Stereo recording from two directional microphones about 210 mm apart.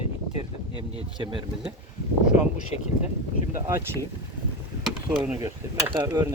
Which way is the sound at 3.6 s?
15° right (ahead or behind).